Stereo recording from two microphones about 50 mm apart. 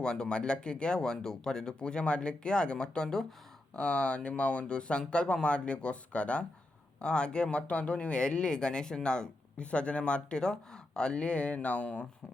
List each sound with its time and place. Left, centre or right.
0.0 s speech: centre